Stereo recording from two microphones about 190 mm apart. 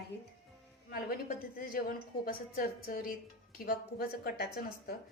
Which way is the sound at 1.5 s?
50° left (ahead or behind).